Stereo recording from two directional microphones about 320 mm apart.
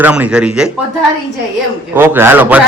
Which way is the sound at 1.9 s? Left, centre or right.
Centre.